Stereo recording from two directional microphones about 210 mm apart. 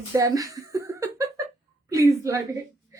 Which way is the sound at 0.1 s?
15° right (ahead or behind).